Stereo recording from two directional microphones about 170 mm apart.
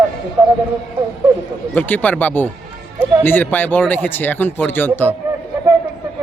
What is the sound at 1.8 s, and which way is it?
Speech, 10° left (ahead or behind).